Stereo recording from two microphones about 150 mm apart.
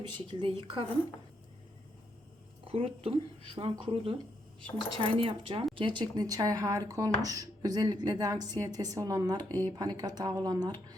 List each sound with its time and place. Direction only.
0.0 s speech: 30° right (ahead or behind)
2.6 s speech: 40° right (ahead or behind)